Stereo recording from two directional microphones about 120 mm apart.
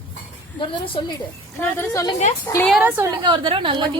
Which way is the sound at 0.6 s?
45° left (ahead or behind).